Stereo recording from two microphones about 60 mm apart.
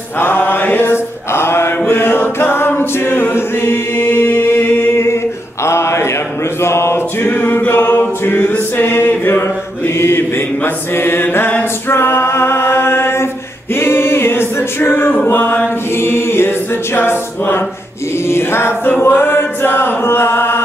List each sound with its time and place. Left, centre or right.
0.2 s mantra: left
1.9 s a capella: left
5.0 s a sound: left
6.6 s mantra: left
8.3 s a capella: left
9.8 s mantra: left
13.7 s a capella: left
15.2 s mantra: left
16.0 s chant: left
19.1 s music: left